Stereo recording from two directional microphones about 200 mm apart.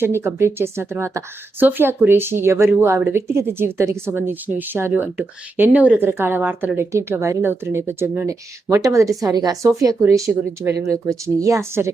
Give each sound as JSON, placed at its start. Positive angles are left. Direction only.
{"t": 0.0, "sound": "a woman's voice", "side_deg": -10}